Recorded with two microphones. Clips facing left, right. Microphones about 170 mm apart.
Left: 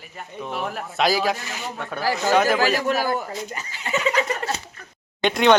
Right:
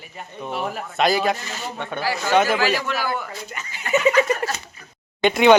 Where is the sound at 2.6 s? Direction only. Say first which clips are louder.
Left 2 dB; 45° left (ahead or behind).